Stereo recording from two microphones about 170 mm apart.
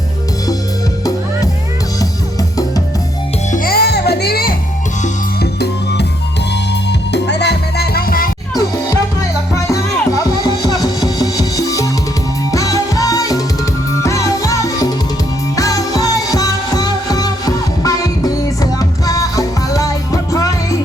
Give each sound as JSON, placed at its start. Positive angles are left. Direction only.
{"t": 3.5, "sound": "music", "side_deg": 60}
{"t": 7.1, "sound": "music", "side_deg": 85}
{"t": 9.6, "sound": "music", "side_deg": 20}